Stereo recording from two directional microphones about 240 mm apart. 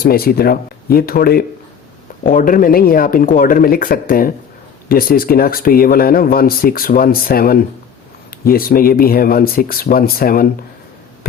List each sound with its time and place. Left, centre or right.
0.0 s speech: left